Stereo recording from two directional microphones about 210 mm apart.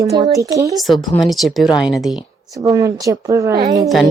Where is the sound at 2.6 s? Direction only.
15° right (ahead or behind).